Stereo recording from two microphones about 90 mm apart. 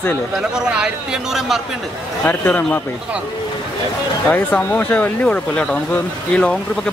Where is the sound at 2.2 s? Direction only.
20° left (ahead or behind).